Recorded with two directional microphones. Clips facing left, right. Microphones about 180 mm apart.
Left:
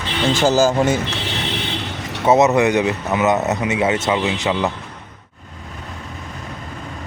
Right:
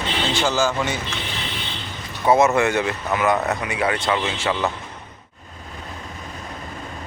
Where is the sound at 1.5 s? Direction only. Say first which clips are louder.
Left 7 dB; 75° left (ahead or behind).